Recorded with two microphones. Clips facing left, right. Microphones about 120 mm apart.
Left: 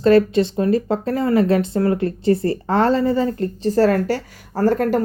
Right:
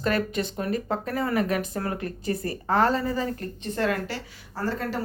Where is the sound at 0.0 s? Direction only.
30° left (ahead or behind).